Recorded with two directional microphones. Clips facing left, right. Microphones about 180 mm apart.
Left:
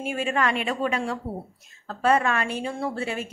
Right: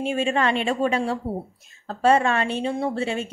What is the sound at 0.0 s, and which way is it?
A woman's voice, 25° right (ahead or behind).